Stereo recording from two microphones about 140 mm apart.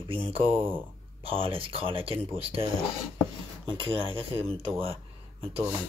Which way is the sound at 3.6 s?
35° right (ahead or behind).